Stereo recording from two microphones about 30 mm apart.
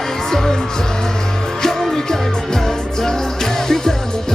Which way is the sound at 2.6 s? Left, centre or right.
Centre.